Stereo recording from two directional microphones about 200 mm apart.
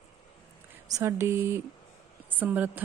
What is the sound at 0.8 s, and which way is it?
Speech, 15° right (ahead or behind).